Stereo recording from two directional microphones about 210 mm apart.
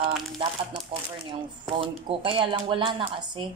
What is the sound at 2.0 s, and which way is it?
Speech, 25° right (ahead or behind).